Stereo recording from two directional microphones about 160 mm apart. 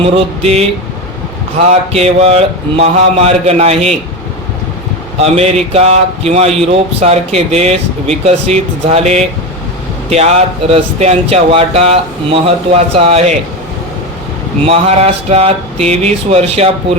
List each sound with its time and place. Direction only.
0.0 s speech: 40° right (ahead or behind)
1.9 s speech: 40° right (ahead or behind)
5.1 s speech: 40° right (ahead or behind)
14.6 s speech: 40° right (ahead or behind)